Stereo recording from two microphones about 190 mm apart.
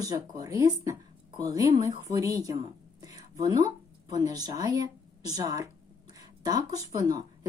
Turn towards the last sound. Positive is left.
turn(degrees=-20)  # may be behind; listen again after turning